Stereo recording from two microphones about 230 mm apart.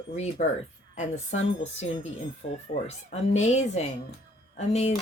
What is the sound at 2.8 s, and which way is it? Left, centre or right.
Speech, left.